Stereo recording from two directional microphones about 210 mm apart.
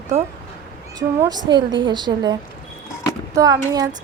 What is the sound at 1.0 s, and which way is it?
Speech, 20° right (ahead or behind).